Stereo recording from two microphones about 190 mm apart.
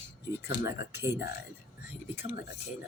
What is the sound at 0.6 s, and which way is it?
Speech, 15° right (ahead or behind).